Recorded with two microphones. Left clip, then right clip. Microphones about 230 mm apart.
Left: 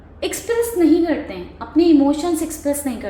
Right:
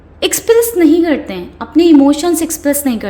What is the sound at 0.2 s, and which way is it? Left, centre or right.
A woman's voice, right.